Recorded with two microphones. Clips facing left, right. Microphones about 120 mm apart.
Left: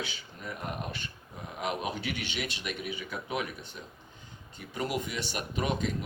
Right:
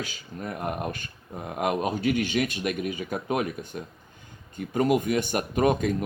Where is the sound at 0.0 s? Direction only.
45° right (ahead or behind).